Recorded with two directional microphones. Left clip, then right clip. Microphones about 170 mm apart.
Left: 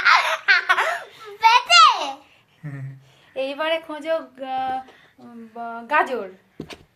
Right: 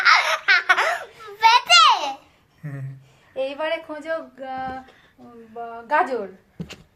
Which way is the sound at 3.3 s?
40° left (ahead or behind).